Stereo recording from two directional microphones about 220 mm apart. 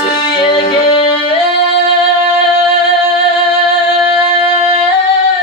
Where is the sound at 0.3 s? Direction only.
20° left (ahead or behind).